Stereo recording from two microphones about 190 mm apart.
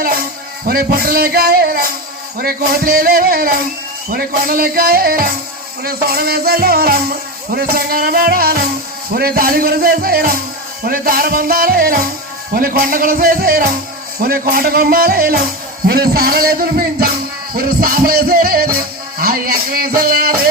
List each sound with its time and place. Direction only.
0.6 s music: 50° right (ahead or behind)